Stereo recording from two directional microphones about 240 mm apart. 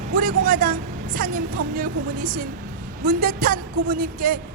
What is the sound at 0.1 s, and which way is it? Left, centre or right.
Speech, right.